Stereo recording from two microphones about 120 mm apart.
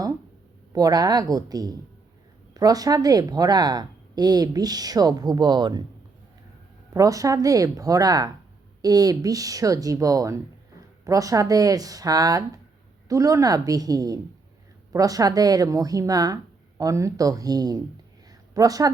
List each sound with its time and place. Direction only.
0.7 s a woman's voice: 30° right (ahead or behind)
6.9 s speech: 30° right (ahead or behind)
18.3 s a sound: 30° right (ahead or behind)